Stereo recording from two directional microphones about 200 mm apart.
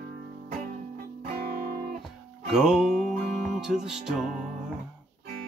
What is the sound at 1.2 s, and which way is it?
Music, 45° right (ahead or behind).